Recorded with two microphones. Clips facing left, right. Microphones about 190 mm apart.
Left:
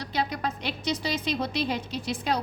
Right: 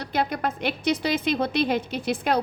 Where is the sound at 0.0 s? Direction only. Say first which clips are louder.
Right 4 dB; 55° right (ahead or behind).